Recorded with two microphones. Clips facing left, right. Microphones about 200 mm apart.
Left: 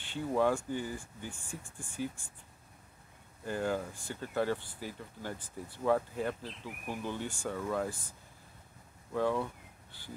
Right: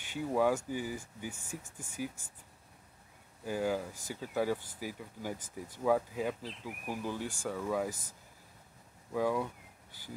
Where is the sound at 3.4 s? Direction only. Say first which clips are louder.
Right 1 dB; 5° right (ahead or behind).